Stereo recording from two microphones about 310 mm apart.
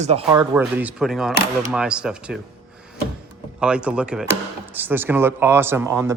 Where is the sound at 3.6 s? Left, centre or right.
Centre.